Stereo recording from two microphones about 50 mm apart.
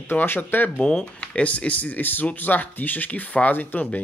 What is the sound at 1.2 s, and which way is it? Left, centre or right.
Speech, left.